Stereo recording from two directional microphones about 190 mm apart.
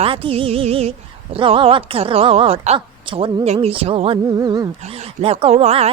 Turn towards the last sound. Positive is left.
turn(degrees=-35)  # may be behind; listen again after turning